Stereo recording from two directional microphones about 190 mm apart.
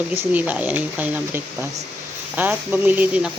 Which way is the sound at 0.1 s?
10° right (ahead or behind).